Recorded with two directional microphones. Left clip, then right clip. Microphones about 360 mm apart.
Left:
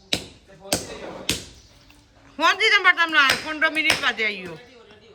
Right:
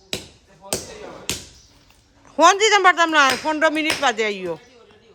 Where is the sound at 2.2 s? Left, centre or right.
Centre.